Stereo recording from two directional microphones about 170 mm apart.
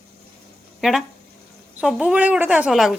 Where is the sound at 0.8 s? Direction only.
Centre (ahead or behind).